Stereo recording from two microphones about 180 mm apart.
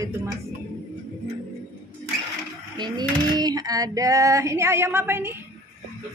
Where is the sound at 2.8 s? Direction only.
20° right (ahead or behind).